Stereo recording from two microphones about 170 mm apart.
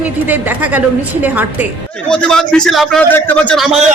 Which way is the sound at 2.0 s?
5° left (ahead or behind).